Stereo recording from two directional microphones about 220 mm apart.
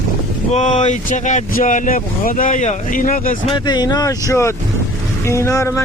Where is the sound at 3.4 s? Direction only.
20° left (ahead or behind).